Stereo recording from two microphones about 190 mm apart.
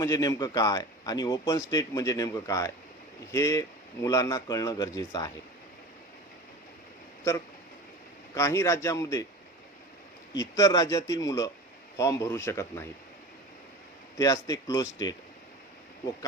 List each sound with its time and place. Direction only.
0.0 s speech: 20° left (ahead or behind)
8.4 s speech: 15° left (ahead or behind)
10.5 s speech: 20° left (ahead or behind)
14.2 s speech: 20° left (ahead or behind)